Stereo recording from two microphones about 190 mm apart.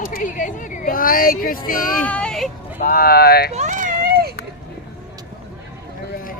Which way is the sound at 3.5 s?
40° right (ahead or behind).